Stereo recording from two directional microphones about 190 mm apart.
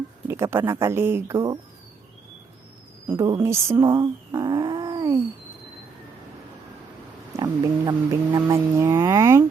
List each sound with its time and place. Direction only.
0.3 s speech: 15° right (ahead or behind)
3.1 s speech: 15° right (ahead or behind)
7.3 s speech: 20° right (ahead or behind)